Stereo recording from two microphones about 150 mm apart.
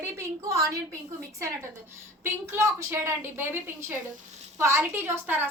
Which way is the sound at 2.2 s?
20° right (ahead or behind).